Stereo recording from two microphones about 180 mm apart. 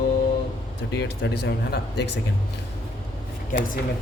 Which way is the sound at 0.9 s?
70° left (ahead or behind).